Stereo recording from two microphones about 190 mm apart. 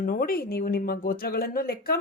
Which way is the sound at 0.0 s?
50° left (ahead or behind).